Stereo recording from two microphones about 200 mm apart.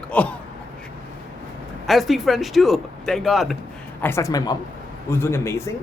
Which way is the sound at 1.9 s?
Centre (ahead or behind).